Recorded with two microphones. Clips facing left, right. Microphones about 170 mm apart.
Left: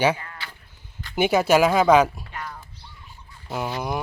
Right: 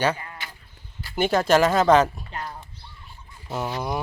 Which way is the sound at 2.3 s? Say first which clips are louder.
Right 1 dB; 30° right (ahead or behind).